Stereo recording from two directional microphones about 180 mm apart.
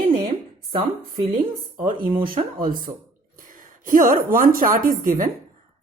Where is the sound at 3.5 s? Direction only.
50° right (ahead or behind).